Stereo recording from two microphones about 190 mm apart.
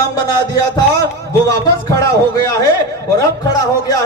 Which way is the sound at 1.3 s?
15° left (ahead or behind).